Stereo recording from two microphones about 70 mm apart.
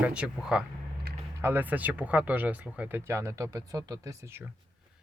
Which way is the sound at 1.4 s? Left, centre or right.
Right.